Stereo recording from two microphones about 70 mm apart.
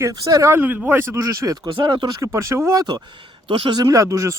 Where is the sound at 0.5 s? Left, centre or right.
Right.